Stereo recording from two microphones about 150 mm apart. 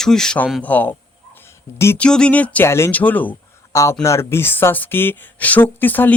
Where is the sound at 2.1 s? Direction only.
5° left (ahead or behind).